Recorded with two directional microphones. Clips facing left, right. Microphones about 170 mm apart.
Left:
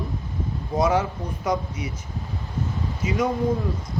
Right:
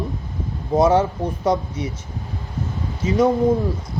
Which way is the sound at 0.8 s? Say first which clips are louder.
Right 6 dB; 30° right (ahead or behind).